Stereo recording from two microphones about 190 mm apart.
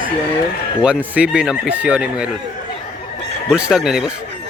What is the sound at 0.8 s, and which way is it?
Speech, 5° right (ahead or behind).